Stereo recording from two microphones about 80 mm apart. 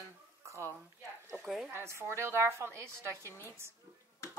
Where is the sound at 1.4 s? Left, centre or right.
Centre.